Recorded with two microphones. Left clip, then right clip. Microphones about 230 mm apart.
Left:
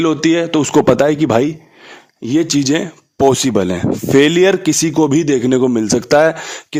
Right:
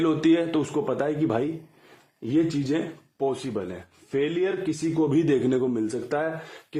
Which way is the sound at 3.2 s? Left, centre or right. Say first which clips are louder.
Left 15 dB; left.